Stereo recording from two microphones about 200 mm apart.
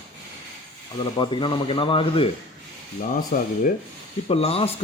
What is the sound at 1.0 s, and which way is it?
Speech, 25° left (ahead or behind).